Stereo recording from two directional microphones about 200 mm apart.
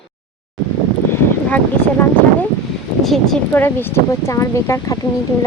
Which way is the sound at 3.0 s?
Centre (ahead or behind).